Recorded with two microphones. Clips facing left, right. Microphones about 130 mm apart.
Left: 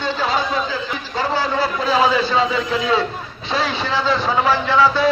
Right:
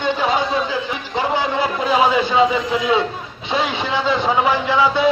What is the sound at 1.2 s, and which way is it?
A man's voice, 20° right (ahead or behind).